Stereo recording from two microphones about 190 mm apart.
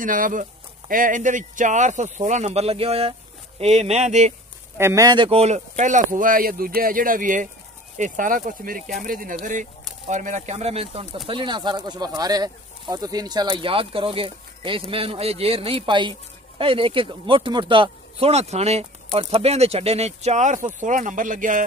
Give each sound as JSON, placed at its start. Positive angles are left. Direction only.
{"t": 0.0, "sound": "speech", "side_deg": -45}
{"t": 4.7, "sound": "speech", "side_deg": -15}